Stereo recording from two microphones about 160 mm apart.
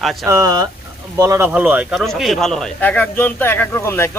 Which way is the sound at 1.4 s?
10° right (ahead or behind).